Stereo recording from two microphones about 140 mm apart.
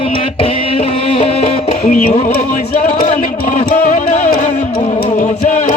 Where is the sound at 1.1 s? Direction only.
45° left (ahead or behind).